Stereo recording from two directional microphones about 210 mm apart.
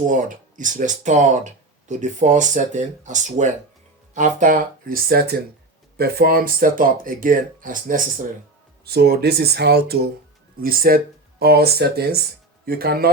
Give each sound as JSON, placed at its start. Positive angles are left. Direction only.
{"t": 0.0, "sound": "speech", "side_deg": -40}